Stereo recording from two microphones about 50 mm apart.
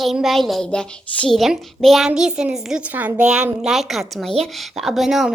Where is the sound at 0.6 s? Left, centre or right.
Centre.